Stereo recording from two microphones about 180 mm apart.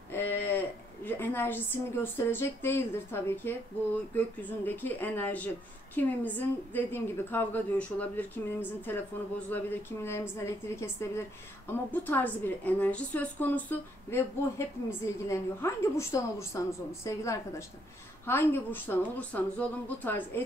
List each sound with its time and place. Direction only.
0.1 s a woman's voice: 10° left (ahead or behind)